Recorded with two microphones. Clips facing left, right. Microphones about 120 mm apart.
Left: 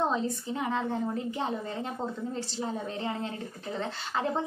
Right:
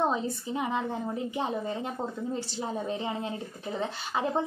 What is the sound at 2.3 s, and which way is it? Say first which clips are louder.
Speech: right 1 dB; 15° right (ahead or behind).